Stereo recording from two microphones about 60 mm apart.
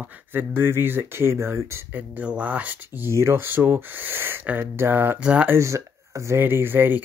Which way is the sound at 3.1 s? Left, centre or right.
Right.